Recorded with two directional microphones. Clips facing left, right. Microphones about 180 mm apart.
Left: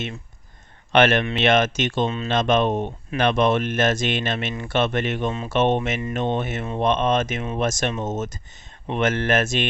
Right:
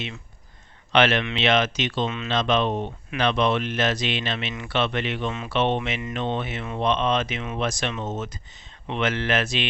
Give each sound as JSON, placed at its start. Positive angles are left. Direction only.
{"t": 0.9, "sound": "speech", "side_deg": 50}